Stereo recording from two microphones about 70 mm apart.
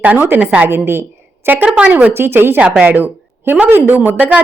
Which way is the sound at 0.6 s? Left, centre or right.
Right.